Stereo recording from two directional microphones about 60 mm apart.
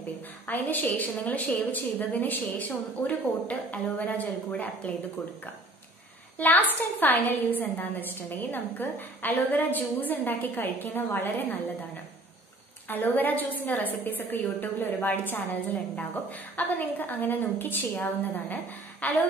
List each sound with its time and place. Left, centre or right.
0.5 s a woman's voice: left
6.3 s a woman's voice: left
12.8 s a woman's voice: left